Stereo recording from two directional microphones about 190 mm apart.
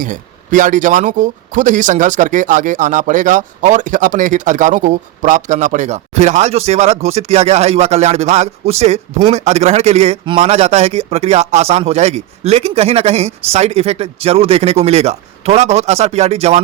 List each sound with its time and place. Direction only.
0.0 s speech: 45° right (ahead or behind)